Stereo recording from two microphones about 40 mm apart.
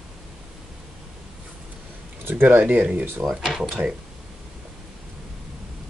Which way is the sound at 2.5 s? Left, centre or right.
Right.